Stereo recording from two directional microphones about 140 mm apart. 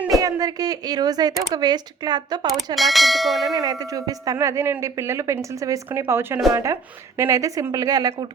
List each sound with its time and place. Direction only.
0.2 s a woman's voice: 25° right (ahead or behind)
2.7 s church bell: centre (ahead or behind)
3.5 s a woman's voice: 25° right (ahead or behind)